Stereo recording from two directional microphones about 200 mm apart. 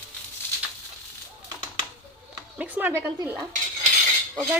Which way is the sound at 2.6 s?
10° right (ahead or behind).